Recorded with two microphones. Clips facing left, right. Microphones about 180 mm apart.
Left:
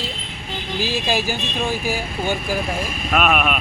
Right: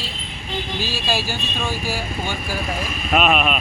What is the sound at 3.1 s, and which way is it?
Speech, centre (ahead or behind).